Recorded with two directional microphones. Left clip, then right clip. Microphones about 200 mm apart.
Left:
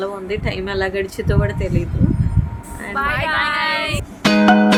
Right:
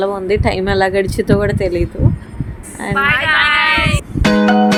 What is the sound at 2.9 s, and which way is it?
Speech, 25° left (ahead or behind).